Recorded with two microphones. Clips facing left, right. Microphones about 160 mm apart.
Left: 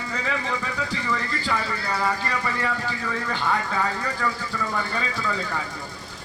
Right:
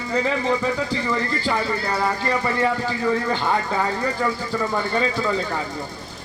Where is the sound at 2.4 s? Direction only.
30° right (ahead or behind).